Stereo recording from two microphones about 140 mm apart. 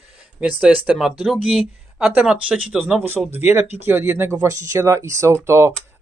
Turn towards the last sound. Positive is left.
turn(degrees=-20)  # may be behind; listen again after turning